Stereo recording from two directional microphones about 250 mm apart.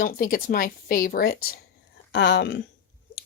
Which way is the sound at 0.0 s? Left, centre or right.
Left.